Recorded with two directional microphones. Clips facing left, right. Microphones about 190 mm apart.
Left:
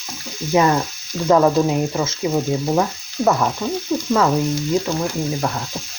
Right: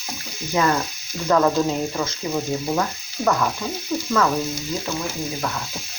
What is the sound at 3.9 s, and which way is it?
Frying, 15° left (ahead or behind).